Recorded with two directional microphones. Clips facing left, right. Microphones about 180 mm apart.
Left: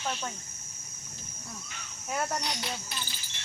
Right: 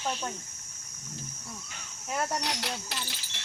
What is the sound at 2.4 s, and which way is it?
Cricket, 80° right.